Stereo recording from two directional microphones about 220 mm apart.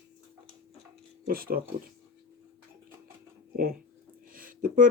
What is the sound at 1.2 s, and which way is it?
Speech, 45° right (ahead or behind).